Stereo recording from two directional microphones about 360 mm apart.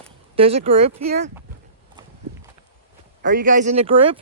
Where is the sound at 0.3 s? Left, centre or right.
Centre.